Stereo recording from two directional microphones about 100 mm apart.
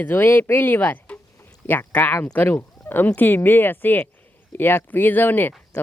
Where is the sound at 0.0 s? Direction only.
25° left (ahead or behind).